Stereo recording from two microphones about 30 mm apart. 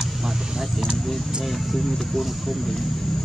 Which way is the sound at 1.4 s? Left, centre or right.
Centre.